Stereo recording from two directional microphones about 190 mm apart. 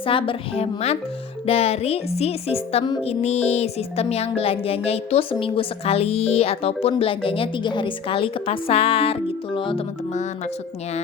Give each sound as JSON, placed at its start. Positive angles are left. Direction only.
{"t": 0.0, "sound": "a woman's voice", "side_deg": 25}
{"t": 1.5, "sound": "music", "side_deg": 35}
{"t": 10.1, "sound": "music", "side_deg": 40}